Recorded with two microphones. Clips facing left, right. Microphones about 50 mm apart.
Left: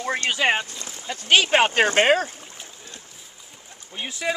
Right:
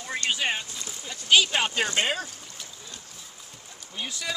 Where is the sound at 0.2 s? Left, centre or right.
Left.